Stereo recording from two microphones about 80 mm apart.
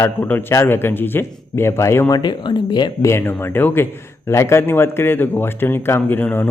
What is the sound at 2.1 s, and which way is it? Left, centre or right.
Speech, left.